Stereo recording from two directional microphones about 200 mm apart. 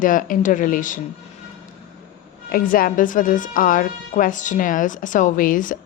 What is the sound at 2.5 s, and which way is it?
A woman's voice, 45° left (ahead or behind).